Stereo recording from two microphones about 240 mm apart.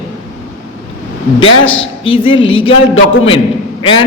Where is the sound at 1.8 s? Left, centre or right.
Left.